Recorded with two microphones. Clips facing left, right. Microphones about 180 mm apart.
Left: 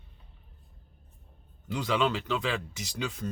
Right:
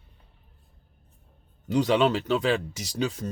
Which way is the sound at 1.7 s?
35° right (ahead or behind).